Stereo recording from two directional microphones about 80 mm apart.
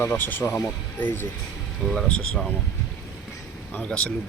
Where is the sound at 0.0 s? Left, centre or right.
Left.